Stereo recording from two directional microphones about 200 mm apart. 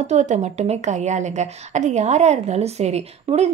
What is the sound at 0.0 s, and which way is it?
Speech, 35° right (ahead or behind).